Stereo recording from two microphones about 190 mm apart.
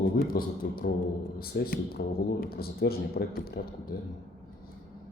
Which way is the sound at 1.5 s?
55° left (ahead or behind).